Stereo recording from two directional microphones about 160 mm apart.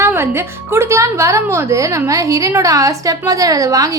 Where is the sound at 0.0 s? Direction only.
15° right (ahead or behind).